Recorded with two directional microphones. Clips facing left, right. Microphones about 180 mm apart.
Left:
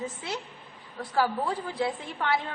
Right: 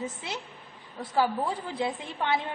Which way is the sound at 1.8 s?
20° right (ahead or behind).